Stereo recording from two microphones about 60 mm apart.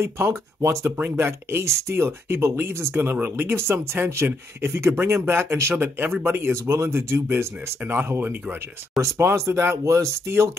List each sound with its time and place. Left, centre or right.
0.0 s a man's voice: right
6.7 s speech: right
7.0 s speech: right
7.8 s a man's voice: right
9.0 s speech: right